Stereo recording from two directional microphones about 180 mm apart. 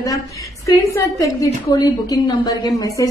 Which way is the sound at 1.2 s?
20° left (ahead or behind).